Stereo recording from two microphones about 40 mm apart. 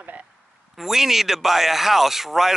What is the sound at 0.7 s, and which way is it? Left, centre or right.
Speech, centre.